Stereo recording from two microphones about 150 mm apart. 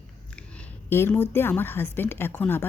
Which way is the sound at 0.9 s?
15° left (ahead or behind).